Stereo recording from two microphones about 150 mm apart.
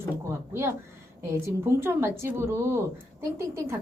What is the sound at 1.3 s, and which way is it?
Speech, 15° right (ahead or behind).